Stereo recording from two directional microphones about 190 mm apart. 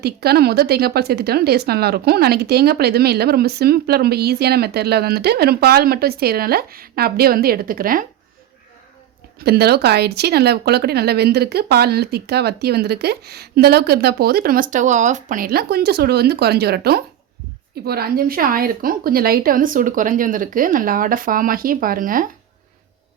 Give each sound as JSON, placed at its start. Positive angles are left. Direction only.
{"t": 0.0, "sound": "speech", "side_deg": -55}
{"t": 9.4, "sound": "a woman's voice", "side_deg": -55}